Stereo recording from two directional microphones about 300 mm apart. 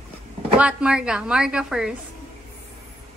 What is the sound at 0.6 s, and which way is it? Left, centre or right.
A woman's voice, centre.